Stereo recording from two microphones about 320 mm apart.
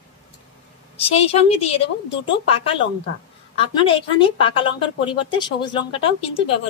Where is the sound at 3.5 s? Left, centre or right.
Centre.